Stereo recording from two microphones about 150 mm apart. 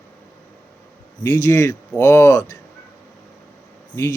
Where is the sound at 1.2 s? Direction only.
20° left (ahead or behind).